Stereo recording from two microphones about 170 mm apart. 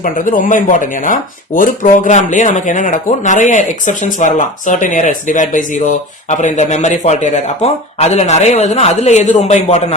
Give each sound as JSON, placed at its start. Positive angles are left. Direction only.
{"t": 0.0, "sound": "speech", "side_deg": 50}